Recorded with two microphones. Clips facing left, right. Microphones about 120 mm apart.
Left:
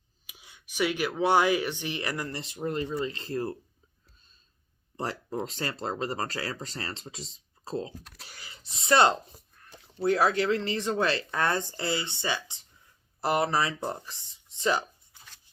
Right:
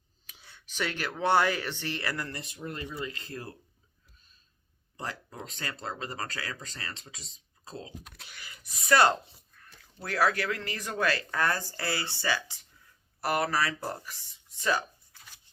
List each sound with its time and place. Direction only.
0.3 s speech: 10° left (ahead or behind)
2.3 s speech: 30° left (ahead or behind)
4.9 s speech: 30° left (ahead or behind)
8.0 s speech: centre (ahead or behind)
8.3 s speech: 30° left (ahead or behind)